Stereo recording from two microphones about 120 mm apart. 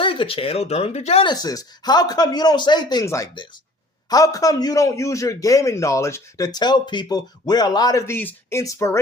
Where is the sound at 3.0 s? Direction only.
25° left (ahead or behind).